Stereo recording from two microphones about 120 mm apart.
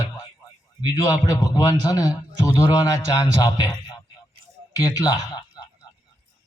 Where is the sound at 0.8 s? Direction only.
30° left (ahead or behind).